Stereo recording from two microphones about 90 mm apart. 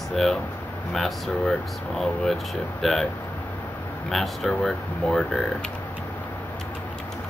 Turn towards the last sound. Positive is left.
turn(degrees=5)  # may be behind; listen again after turning